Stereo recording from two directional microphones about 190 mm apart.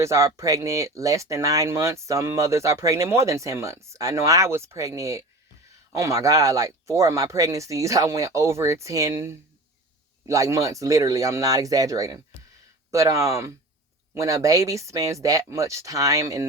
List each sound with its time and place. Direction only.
0.0 s speech: 15° right (ahead or behind)